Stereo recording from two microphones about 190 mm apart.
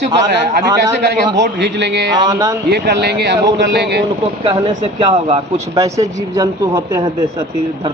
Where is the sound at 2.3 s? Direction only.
20° right (ahead or behind).